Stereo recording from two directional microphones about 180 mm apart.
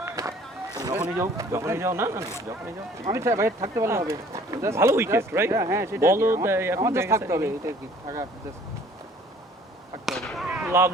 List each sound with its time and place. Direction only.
0.0 s run: 20° right (ahead or behind)
1.1 s a man's voice: 15° right (ahead or behind)
10.1 s fireworks: centre (ahead or behind)
10.5 s a sound: 10° right (ahead or behind)